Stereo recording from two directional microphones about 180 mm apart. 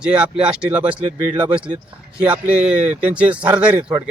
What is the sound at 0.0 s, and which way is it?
A man's voice, 5° right (ahead or behind).